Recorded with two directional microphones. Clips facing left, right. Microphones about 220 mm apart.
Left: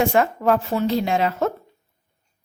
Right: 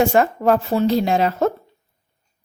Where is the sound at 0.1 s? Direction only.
35° right (ahead or behind).